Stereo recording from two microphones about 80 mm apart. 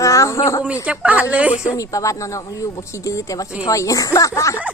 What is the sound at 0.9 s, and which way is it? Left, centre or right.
Speech, centre.